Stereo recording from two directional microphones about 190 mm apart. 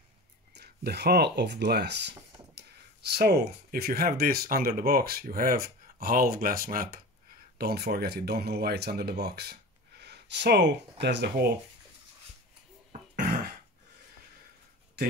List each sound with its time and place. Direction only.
0.6 s speech: 60° right (ahead or behind)